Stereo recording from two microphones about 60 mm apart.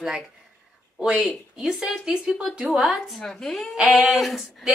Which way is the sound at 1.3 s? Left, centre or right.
Centre.